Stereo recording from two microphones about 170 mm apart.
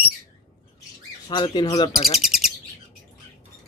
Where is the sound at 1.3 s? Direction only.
25° left (ahead or behind).